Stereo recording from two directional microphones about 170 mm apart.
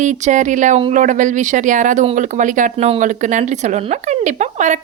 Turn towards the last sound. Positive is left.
turn(degrees=-45)  # may be behind; listen again after turning